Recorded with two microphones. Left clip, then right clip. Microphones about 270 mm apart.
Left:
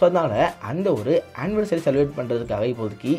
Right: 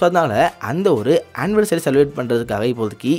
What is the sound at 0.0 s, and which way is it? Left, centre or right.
Speech, right.